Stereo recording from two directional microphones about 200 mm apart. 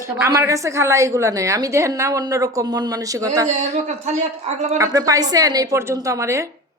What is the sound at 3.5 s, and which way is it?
Speech, 35° right (ahead or behind).